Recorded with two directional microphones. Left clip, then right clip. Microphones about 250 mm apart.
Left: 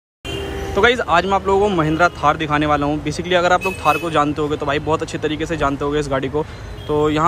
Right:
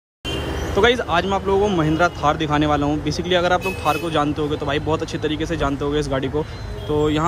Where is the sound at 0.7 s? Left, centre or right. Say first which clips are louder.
Left 3 dB; centre.